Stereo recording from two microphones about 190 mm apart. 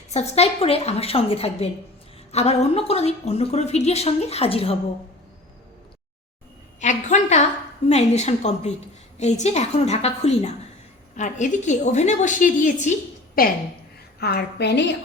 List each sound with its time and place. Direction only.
0.1 s a woman's voice: 35° left (ahead or behind)
6.7 s a woman's voice: 40° left (ahead or behind)
14.2 s a woman's voice: 55° left (ahead or behind)